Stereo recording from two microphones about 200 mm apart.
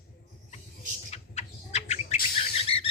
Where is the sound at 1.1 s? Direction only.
35° left (ahead or behind).